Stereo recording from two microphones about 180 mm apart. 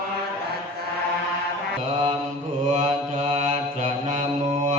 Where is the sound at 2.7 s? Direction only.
40° right (ahead or behind).